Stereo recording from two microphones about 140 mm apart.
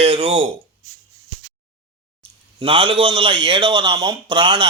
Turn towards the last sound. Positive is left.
turn(degrees=-35)  # may be behind; listen again after turning